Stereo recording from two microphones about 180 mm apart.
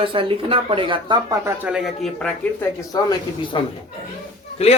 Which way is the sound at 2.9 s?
20° left (ahead or behind).